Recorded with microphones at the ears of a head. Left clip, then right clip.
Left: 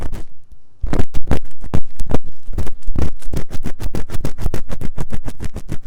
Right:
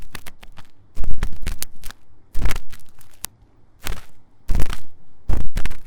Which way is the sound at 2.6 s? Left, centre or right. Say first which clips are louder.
Left 15 dB; left.